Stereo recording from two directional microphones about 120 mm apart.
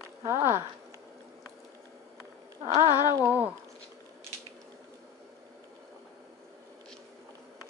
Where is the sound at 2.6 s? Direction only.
50° right (ahead or behind).